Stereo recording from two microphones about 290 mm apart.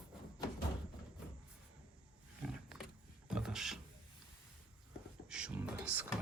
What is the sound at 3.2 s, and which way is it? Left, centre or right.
Beatboxing, centre.